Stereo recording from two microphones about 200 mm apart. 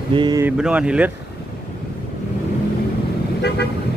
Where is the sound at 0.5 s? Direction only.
5° right (ahead or behind).